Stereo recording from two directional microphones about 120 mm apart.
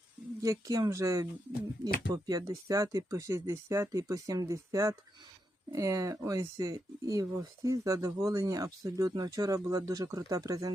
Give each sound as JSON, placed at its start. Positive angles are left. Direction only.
{"t": 0.4, "sound": "speech", "side_deg": -30}